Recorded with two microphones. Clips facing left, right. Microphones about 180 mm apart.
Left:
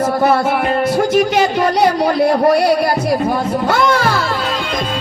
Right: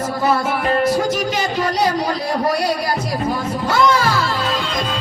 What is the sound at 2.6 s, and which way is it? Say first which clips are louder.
Music: left 7 dB; 60° left (ahead or behind).